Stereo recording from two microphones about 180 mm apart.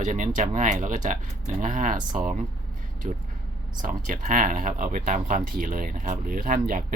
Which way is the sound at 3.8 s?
45° right (ahead or behind).